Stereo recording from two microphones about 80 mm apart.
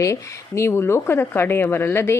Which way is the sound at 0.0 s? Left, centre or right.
Left.